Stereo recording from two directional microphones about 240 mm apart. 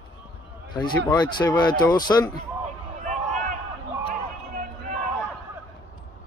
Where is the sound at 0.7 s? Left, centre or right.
Centre.